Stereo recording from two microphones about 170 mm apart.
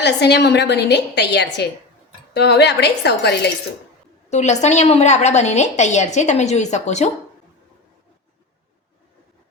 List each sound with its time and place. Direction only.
0.0 s a woman's voice: 80° left
4.3 s a woman's voice: 45° left (ahead or behind)